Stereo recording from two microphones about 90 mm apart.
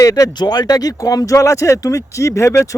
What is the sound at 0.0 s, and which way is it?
Speech, 40° left (ahead or behind).